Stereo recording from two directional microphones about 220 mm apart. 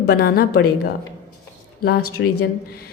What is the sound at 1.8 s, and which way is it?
A woman's voice, 45° left (ahead or behind).